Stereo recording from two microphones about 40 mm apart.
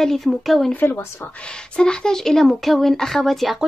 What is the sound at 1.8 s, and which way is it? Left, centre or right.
A woman's voice, centre.